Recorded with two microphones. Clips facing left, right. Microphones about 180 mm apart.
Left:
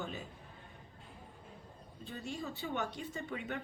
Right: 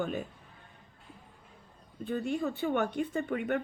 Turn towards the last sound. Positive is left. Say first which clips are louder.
# right 10 dB
turn(degrees=-55)  # may be behind; listen again after turning